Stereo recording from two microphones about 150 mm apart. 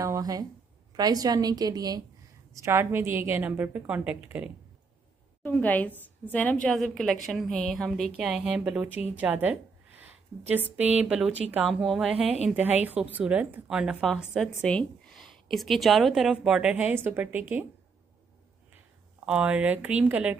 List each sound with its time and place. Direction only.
0.0 s a woman's voice: 25° right (ahead or behind)
5.4 s a woman's voice: 10° left (ahead or behind); by 9.0 s 5° right (ahead or behind)
9.2 s a sound: 10° right (ahead or behind)
10.5 s a woman's voice: 10° right (ahead or behind)
14.5 s a sound: 10° left (ahead or behind)
15.5 s a woman's voice: centre (ahead or behind)
18.7 s speech: 10° right (ahead or behind)